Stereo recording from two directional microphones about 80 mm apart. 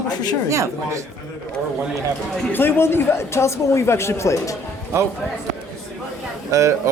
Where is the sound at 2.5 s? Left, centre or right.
Left.